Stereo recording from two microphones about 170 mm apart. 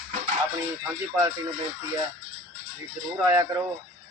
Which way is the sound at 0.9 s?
15° right (ahead or behind).